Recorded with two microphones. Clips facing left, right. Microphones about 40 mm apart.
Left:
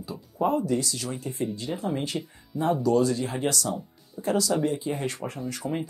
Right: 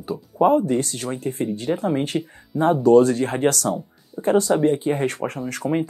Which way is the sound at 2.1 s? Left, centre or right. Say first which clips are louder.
Right 7 dB; right.